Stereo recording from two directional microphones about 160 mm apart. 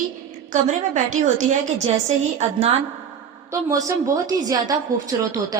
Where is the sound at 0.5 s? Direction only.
50° right (ahead or behind).